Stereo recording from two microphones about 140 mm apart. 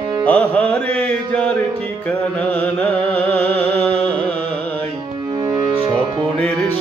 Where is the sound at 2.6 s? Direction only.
10° left (ahead or behind).